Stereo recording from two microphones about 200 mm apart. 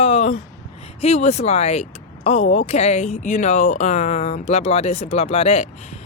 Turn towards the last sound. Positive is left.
turn(degrees=30)  # may be behind; listen again after turning